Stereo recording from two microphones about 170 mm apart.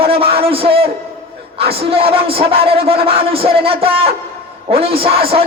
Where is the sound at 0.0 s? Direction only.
35° right (ahead or behind).